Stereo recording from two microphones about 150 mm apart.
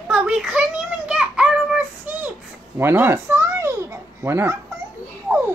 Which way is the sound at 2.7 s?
15° right (ahead or behind).